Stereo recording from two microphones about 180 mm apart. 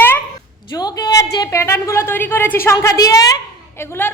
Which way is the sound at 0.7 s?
20° left (ahead or behind).